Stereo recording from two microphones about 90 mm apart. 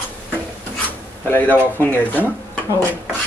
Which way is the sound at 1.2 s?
20° left (ahead or behind).